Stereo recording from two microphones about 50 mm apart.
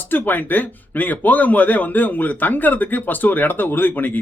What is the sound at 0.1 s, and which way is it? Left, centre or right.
A man's voice, left.